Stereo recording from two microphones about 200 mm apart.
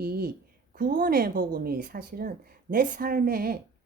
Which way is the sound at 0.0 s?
50° right (ahead or behind).